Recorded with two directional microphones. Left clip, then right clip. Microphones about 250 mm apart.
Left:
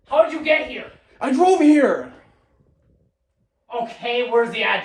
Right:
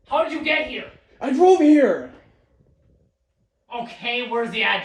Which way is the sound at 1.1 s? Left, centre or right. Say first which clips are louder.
Right 1 dB; left.